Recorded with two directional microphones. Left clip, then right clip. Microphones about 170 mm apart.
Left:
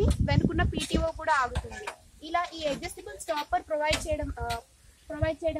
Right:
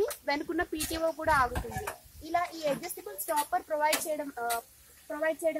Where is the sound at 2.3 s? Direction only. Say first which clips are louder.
Left 1 dB; 5° right (ahead or behind).